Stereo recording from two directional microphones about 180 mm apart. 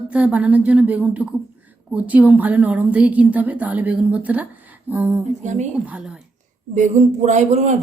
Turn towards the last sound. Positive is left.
turn(degrees=-40)  # may be behind; listen again after turning